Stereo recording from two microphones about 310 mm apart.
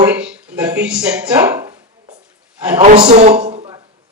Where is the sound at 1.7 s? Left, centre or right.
Right.